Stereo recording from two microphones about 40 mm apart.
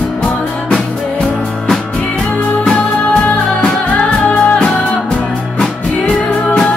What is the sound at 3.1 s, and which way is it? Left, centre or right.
Music, left.